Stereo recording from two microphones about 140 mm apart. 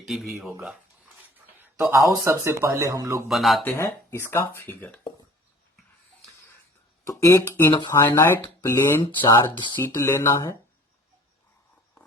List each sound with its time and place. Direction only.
0.0 s speech: centre (ahead or behind)
0.6 s a sound: 10° right (ahead or behind)
2.2 s speech: 20° right (ahead or behind)
3.2 s speech: centre (ahead or behind)
3.6 s speech: 15° left (ahead or behind)
7.0 s speech: 25° left (ahead or behind)
7.7 s speech: 35° left (ahead or behind)
7.9 s speech: 20° left (ahead or behind)
9.8 s speech: 20° left (ahead or behind)